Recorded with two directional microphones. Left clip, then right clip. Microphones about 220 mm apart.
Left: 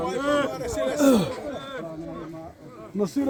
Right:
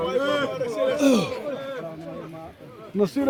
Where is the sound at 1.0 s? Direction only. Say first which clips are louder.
Left 3 dB; 30° left (ahead or behind).